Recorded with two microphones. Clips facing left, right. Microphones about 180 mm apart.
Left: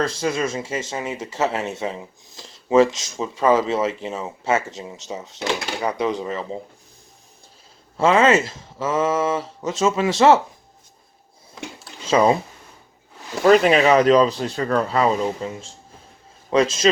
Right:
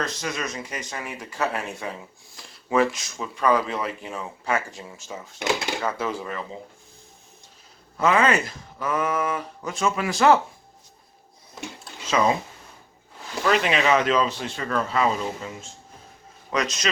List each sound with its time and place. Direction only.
0.0 s speech: 30° left (ahead or behind)
7.9 s speech: 25° left (ahead or behind)
12.0 s speech: 30° left (ahead or behind)
13.4 s speech: 40° left (ahead or behind)